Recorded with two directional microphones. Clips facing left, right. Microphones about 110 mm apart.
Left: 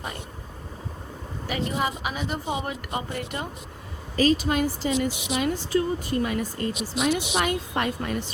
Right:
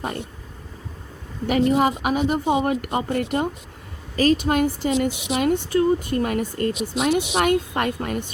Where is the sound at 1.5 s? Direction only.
45° right (ahead or behind).